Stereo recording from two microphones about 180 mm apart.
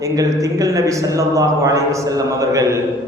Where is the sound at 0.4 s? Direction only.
20° right (ahead or behind).